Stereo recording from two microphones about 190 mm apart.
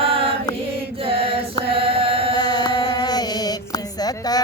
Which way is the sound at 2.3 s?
20° left (ahead or behind).